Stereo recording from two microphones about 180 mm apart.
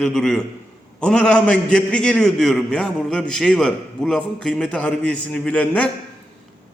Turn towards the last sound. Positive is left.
turn(degrees=5)  # may be behind; listen again after turning